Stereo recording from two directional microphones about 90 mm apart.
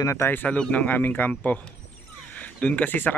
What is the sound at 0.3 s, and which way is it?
Speech, 20° left (ahead or behind).